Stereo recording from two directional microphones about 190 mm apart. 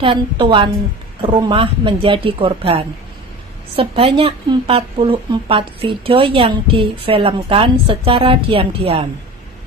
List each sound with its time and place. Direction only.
0.0 s a woman's voice: 25° right (ahead or behind)